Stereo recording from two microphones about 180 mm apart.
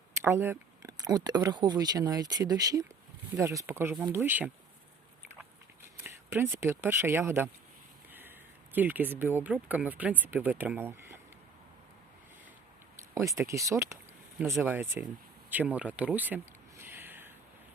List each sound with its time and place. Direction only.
0.2 s speech: 15° right (ahead or behind)
6.0 s speech: 10° right (ahead or behind)
8.7 s speech: 10° right (ahead or behind)
13.1 s speech: 15° right (ahead or behind)
15.4 s a sound: 10° right (ahead or behind)